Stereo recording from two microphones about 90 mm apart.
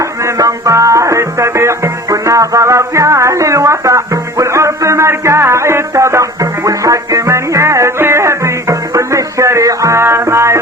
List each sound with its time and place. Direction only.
0.0 s music: 35° right (ahead or behind)